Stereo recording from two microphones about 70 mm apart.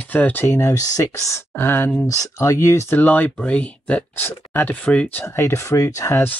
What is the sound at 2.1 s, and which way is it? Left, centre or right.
Speech, left.